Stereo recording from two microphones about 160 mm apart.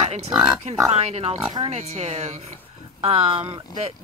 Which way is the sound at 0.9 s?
40° right (ahead or behind).